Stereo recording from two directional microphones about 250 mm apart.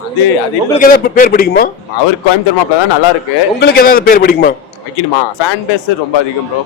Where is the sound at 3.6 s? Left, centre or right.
Left.